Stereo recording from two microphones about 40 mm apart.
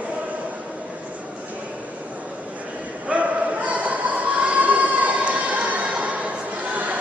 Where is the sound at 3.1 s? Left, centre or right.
Right.